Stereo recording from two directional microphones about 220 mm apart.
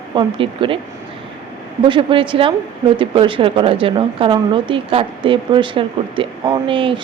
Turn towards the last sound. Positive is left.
turn(degrees=-25)  # may be behind; listen again after turning